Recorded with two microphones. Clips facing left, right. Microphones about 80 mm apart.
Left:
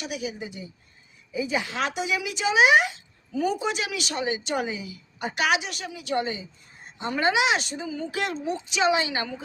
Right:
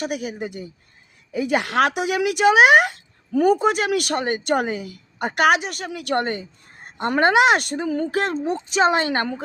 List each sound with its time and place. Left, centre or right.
0.0 s speech: right